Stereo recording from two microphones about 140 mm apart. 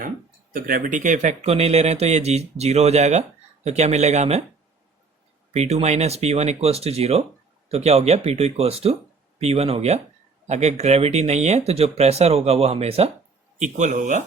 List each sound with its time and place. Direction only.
0.5 s speech: 70° right (ahead or behind); by 4.4 s 50° right (ahead or behind)
5.5 s speech: 50° right (ahead or behind)
13.6 s speech: 60° right (ahead or behind)